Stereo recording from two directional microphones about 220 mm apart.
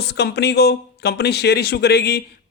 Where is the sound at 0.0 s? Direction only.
50° left (ahead or behind).